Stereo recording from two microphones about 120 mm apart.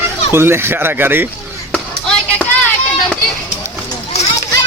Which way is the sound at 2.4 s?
10° left (ahead or behind).